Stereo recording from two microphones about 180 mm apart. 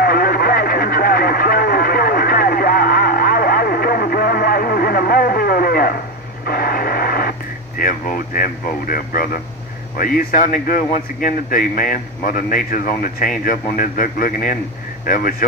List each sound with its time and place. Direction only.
0.0 s radio: 55° left (ahead or behind)
7.8 s speech: 50° left (ahead or behind)